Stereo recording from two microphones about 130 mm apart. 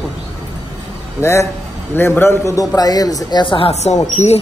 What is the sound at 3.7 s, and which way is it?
Speech, 55° left (ahead or behind).